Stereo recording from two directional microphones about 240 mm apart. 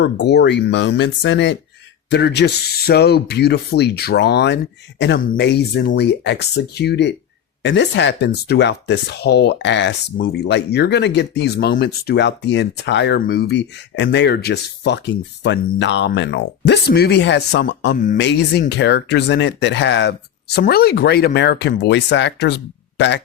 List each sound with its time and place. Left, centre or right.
0.0 s speech: left
18.2 s speech: left